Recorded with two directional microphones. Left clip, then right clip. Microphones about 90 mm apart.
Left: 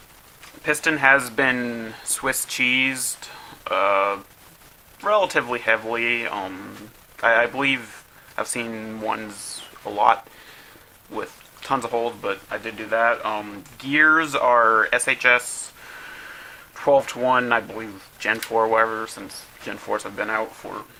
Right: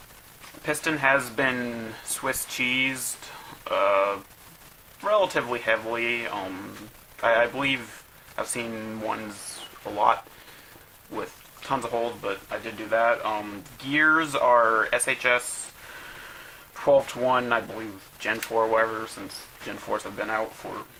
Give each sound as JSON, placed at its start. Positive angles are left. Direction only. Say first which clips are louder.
{"t": 0.6, "sound": "speech", "louder": "left 5 dB", "side_deg": 35}
{"t": 11.1, "sound": "speech", "louder": "left 3 dB", "side_deg": 40}
{"t": 16.8, "sound": "speech", "louder": "left 3 dB", "side_deg": 35}